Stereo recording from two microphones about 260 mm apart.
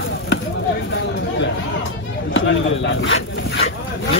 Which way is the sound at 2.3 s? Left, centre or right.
Left.